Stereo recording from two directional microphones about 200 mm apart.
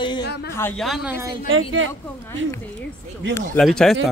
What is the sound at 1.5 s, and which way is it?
Speech, 80° right.